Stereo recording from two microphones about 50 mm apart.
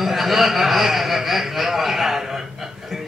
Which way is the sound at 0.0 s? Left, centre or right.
Centre.